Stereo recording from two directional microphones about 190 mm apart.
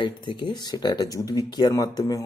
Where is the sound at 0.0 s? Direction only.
25° left (ahead or behind).